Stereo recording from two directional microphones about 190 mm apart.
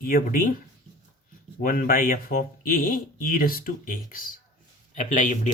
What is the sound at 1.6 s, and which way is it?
Speech, 45° left (ahead or behind).